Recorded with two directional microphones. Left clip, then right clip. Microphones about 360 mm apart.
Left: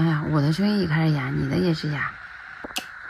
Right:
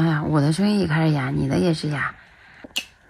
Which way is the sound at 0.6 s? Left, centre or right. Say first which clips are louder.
Right 2 dB; right.